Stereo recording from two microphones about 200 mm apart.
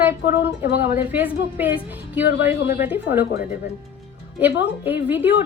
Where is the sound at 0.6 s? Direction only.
55° left (ahead or behind).